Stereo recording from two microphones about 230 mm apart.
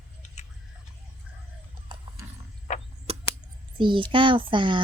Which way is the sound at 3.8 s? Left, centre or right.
Right.